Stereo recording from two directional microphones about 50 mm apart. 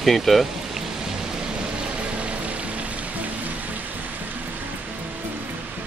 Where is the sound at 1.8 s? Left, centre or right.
Right.